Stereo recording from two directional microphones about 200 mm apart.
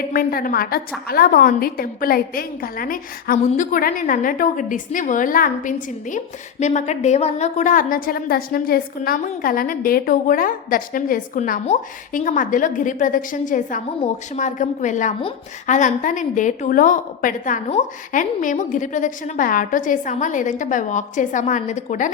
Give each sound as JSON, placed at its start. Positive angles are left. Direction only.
{"t": 0.1, "sound": "a woman's voice", "side_deg": 45}